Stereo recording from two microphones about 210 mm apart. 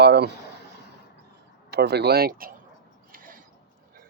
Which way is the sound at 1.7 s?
50° right (ahead or behind).